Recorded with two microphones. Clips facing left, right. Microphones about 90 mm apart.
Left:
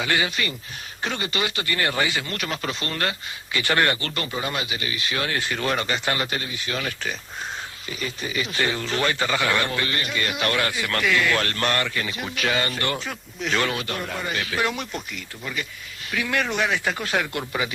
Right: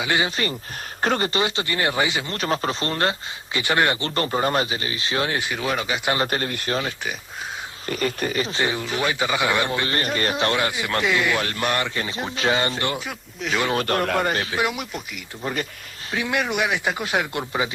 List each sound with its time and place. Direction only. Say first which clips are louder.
0.0 s speech: right 1 dB; 20° right (ahead or behind)
0.3 s speech: right 3 dB; 35° right (ahead or behind); by 4.1 s 20° right (ahead or behind)
4.1 s speech: right 6 dB; 40° right (ahead or behind); by 5.5 s 20° right (ahead or behind)
5.5 s speech: left 2 dB; 5° right (ahead or behind)
6.4 s speech: right 5 dB; 50° right (ahead or behind)
7.9 s speech: right 8 dB; 55° right (ahead or behind)
8.4 s speech: left 2 dB; 30° right (ahead or behind)
8.6 s speech: left 2 dB; 15° right (ahead or behind)
9.9 s speech: right 4 dB; 40° right (ahead or behind); by 11.9 s 15° right (ahead or behind)
11.9 s speech: right 1 dB; 30° right (ahead or behind)
13.1 s speech: even; 5° right (ahead or behind)
13.7 s speech: right 8 dB; 50° right (ahead or behind); by 14.3 s 65° right (ahead or behind)
14.5 s speech: right 1 dB; 10° right (ahead or behind)
16.1 s speech: right 1 dB; 20° right (ahead or behind)